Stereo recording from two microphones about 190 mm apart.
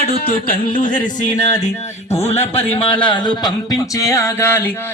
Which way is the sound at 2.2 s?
30° left (ahead or behind).